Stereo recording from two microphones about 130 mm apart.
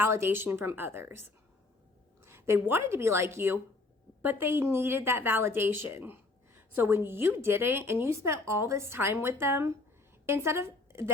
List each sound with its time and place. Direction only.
0.0 s a woman's voice: 15° right (ahead or behind)